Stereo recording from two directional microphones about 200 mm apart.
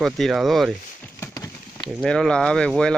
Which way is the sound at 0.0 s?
Centre (ahead or behind).